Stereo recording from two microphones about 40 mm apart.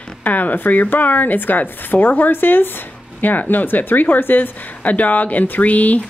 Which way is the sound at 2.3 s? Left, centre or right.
Left.